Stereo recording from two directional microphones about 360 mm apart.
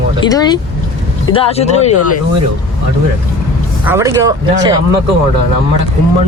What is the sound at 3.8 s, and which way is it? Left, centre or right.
Speech, centre.